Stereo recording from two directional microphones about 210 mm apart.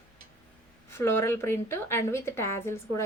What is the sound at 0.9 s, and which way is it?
A woman's voice, 10° left (ahead or behind).